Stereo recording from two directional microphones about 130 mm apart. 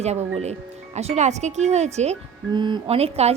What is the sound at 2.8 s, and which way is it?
Speech, 50° right (ahead or behind).